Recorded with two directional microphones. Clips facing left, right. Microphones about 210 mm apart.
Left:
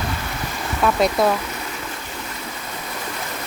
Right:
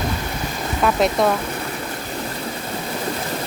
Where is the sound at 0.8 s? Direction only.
Centre (ahead or behind).